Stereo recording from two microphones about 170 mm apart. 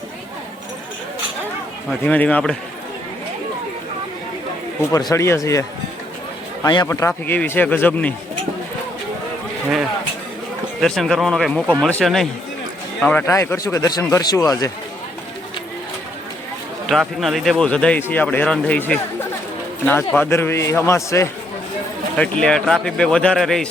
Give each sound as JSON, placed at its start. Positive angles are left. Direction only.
{"t": 1.9, "sound": "speech", "side_deg": 10}
{"t": 4.9, "sound": "a man's voice", "side_deg": 20}
{"t": 10.8, "sound": "speech", "side_deg": 0}
{"t": 16.9, "sound": "speech", "side_deg": 0}
{"t": 22.2, "sound": "speech", "side_deg": 5}